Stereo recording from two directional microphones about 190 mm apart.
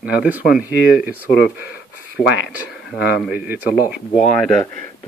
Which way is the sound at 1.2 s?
60° left (ahead or behind).